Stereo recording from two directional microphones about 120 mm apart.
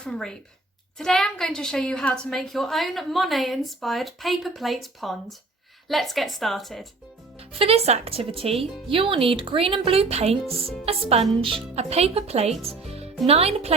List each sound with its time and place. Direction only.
0.0 s a woman's voice: 5° left (ahead or behind)
7.3 s speech: 55° right (ahead or behind)